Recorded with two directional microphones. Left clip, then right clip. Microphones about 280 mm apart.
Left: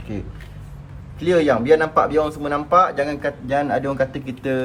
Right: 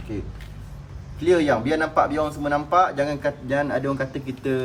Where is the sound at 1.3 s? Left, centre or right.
Left.